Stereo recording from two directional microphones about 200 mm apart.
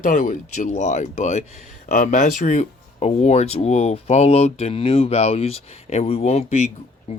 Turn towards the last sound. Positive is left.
turn(degrees=35)  # may be behind; listen again after turning